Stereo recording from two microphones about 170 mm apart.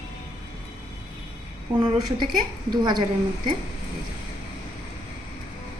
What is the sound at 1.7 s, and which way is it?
A woman's voice, 20° right (ahead or behind).